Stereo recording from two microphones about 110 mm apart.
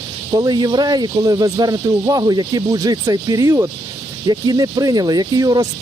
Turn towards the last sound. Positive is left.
turn(degrees=-40)  # may be behind; listen again after turning